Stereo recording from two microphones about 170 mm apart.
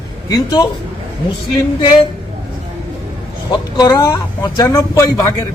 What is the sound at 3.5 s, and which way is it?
A man's voice, 25° left (ahead or behind).